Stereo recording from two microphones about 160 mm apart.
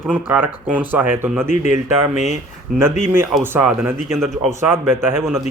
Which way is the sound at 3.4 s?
10° right (ahead or behind).